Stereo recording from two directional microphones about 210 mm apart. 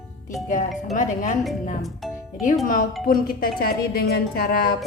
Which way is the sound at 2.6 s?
40° left (ahead or behind).